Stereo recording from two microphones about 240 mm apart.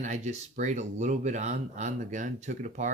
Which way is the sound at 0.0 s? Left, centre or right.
Right.